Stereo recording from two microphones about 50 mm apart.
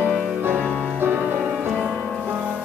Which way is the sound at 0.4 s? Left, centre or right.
Right.